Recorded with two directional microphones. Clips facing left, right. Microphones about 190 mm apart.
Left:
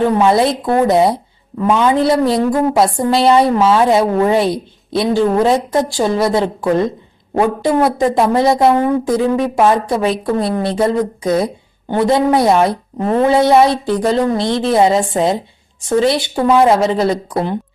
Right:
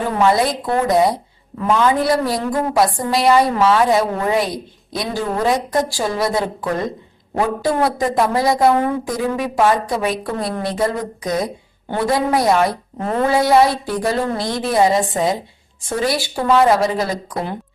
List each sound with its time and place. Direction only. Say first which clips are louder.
0.2 s a woman's voice: left 3 dB; 25° left (ahead or behind)